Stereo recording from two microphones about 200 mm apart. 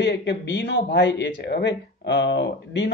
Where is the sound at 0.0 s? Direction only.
60° left (ahead or behind).